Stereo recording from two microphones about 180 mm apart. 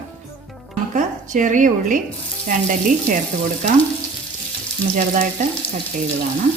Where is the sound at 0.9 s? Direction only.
45° right (ahead or behind).